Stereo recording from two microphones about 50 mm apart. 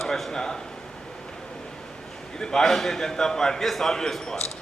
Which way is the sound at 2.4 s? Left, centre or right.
Centre.